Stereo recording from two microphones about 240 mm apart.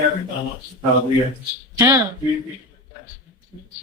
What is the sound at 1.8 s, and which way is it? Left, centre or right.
Speech, centre.